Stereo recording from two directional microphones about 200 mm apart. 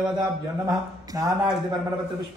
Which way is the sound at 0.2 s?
15° right (ahead or behind).